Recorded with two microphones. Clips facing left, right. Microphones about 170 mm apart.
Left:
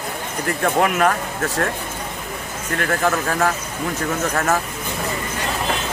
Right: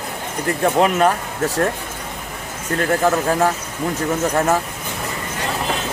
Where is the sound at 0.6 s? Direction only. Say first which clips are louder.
Right 2 dB; 25° right (ahead or behind).